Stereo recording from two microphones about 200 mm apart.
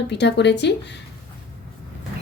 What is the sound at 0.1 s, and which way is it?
Speech, 60° left (ahead or behind).